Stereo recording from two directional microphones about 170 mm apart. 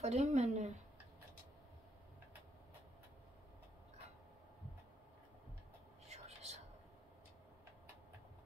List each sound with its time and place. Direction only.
0.0 s speech: 40° right (ahead or behind)
6.0 s whispering: 40° right (ahead or behind)